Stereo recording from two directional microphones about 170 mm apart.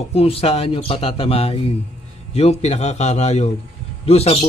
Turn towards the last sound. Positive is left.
turn(degrees=35)  # may be behind; listen again after turning